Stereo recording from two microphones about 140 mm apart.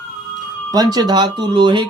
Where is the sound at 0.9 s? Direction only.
30° right (ahead or behind).